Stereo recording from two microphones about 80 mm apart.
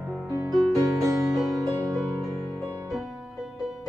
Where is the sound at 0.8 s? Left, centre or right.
Right.